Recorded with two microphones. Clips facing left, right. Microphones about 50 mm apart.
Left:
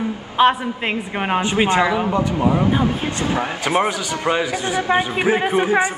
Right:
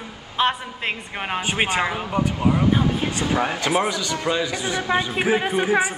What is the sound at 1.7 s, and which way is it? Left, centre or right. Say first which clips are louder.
Speech: left 6 dB; left.